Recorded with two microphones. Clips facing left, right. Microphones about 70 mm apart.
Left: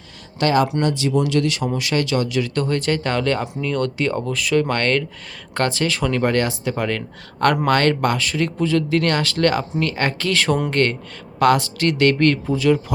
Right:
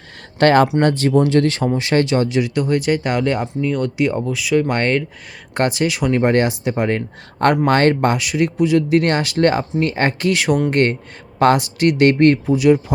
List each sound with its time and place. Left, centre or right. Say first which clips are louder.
0.3 s speech: right 5 dB; right
2.6 s speech: right 3 dB; centre
4.7 s speech: right 2 dB; centre